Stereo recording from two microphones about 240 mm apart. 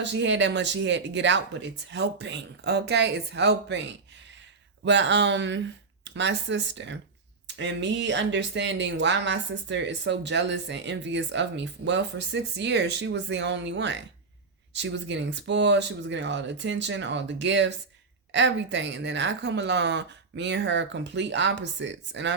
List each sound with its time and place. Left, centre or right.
0.0 s speech: right